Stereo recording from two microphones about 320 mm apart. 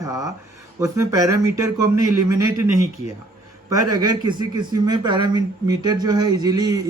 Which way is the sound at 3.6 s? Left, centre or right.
Centre.